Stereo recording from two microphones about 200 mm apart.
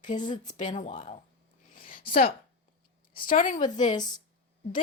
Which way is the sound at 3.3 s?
40° left (ahead or behind).